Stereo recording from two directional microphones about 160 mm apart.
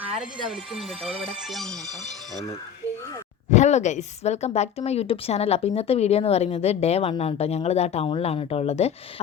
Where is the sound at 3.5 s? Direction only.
45° left (ahead or behind).